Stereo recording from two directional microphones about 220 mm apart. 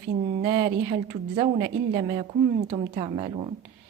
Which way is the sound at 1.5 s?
50° right (ahead or behind).